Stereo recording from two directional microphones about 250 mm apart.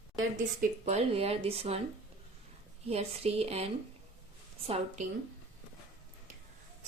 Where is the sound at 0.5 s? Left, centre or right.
Right.